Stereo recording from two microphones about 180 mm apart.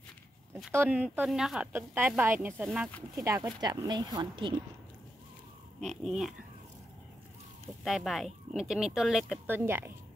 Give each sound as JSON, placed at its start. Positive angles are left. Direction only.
{"t": 0.7, "sound": "speech", "side_deg": -10}
{"t": 5.9, "sound": "speech", "side_deg": 0}
{"t": 7.8, "sound": "speech", "side_deg": 0}